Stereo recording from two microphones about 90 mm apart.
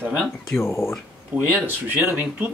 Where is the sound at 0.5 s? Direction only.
30° left (ahead or behind).